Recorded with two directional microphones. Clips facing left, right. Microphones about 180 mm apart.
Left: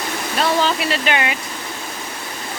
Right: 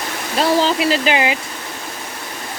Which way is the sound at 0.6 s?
30° right (ahead or behind).